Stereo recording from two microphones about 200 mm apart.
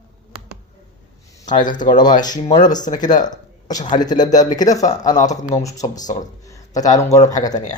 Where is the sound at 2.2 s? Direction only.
20° left (ahead or behind).